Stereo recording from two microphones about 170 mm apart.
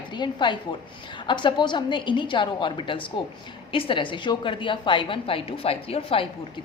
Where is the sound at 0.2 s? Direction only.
25° left (ahead or behind).